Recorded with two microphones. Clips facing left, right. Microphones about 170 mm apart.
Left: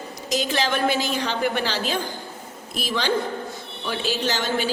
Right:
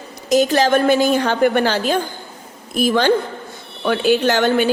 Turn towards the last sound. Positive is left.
turn(degrees=-60)  # may be behind; listen again after turning